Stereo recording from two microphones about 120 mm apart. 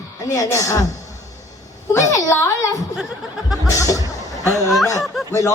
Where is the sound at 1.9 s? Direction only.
25° left (ahead or behind).